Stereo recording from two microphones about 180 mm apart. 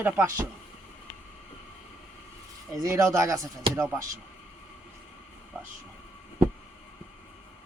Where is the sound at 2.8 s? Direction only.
15° right (ahead or behind).